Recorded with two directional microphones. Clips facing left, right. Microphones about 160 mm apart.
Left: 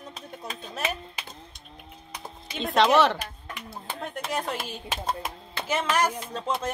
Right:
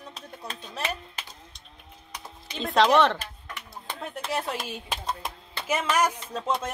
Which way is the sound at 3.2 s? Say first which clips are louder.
Left 3 dB; 10° left (ahead or behind).